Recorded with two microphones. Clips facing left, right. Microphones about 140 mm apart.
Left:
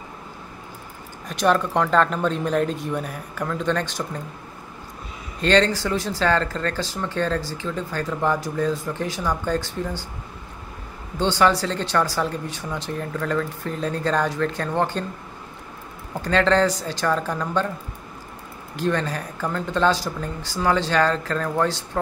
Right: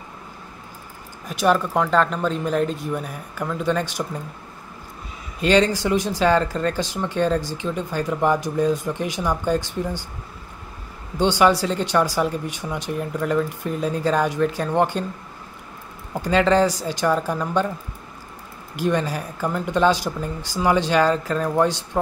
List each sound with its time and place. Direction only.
1.2 s speech: 5° right (ahead or behind)
5.4 s speech: 10° right (ahead or behind)
11.1 s speech: 15° right (ahead or behind)
16.2 s speech: 10° right (ahead or behind)
18.8 s speech: 10° right (ahead or behind)